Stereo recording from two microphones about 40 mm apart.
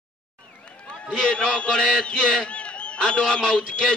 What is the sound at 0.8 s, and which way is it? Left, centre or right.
A man's voice, left.